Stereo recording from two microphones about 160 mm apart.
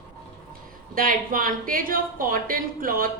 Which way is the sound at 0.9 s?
60° right (ahead or behind).